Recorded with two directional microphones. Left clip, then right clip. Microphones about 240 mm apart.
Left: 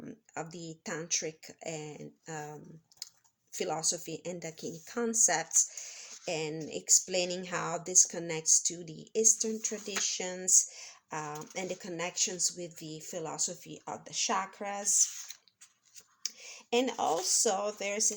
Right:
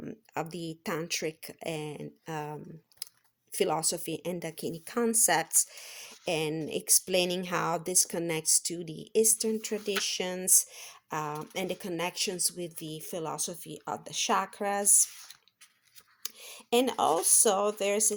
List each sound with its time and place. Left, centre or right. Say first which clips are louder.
0.0 s speech: right 5 dB; right
3.0 s a sound: even; right
3.5 s speech: right 4 dB; right
16.2 s speech: left 2 dB; right